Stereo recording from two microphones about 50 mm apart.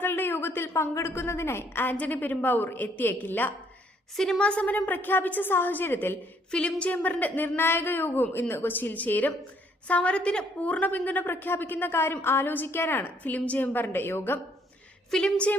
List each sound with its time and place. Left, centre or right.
0.0 s a woman's voice: left
2.0 s a woman's voice: left
4.4 s a woman's voice: left
6.5 s a woman's voice: left
6.9 s speech: left
9.8 s a woman's voice: left
13.2 s a woman's voice: left
15.1 s a woman's voice: centre